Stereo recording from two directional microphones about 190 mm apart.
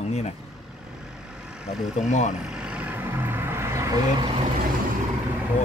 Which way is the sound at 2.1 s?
40° left (ahead or behind).